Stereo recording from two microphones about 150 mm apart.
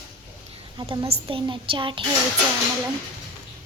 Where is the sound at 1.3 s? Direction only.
35° right (ahead or behind).